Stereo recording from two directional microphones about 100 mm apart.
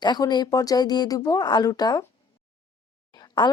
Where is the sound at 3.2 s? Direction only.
45° left (ahead or behind).